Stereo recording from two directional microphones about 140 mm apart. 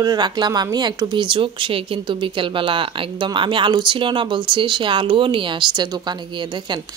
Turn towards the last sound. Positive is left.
turn(degrees=-30)  # may be behind; listen again after turning